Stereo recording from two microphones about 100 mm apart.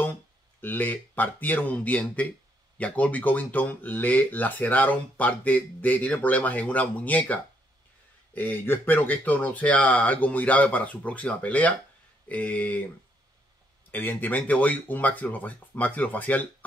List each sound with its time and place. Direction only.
0.6 s speech: 20° left (ahead or behind)
8.4 s speech: 20° left (ahead or behind)
13.9 s speech: 20° left (ahead or behind)